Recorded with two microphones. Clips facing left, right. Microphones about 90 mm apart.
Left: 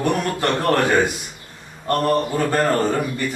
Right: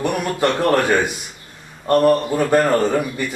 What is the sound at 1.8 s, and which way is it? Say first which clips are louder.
Speech: right 4 dB; 10° right (ahead or behind).